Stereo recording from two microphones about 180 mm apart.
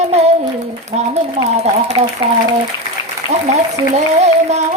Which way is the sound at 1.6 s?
40° right (ahead or behind).